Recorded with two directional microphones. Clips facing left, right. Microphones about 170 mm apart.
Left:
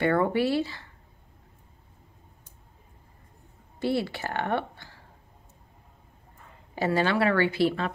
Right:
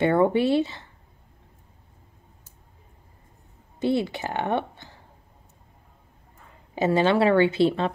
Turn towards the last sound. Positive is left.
turn(degrees=-25)  # may be behind; listen again after turning